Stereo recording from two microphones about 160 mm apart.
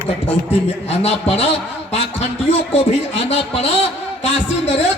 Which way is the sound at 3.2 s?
40° left (ahead or behind).